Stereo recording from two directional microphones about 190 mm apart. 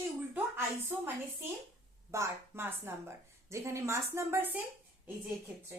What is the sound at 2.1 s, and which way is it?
A woman's voice, 15° right (ahead or behind).